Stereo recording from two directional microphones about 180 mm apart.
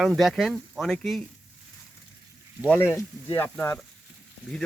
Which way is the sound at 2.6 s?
10° left (ahead or behind).